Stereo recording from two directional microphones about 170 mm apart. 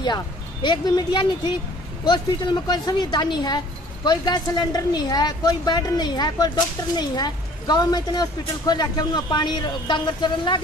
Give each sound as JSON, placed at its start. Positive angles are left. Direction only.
{"t": 0.0, "sound": "a woman's voice", "side_deg": 25}